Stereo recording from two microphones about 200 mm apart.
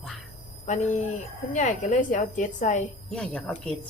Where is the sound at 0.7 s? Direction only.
35° left (ahead or behind).